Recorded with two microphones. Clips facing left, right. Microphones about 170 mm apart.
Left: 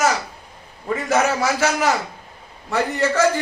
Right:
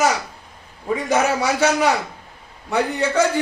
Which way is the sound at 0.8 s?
15° right (ahead or behind).